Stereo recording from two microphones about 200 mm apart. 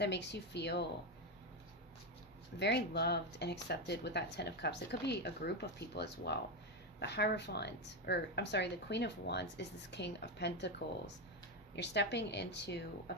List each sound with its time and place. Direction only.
0.0 s speech: 60° left (ahead or behind)
2.6 s speech: 55° left (ahead or behind)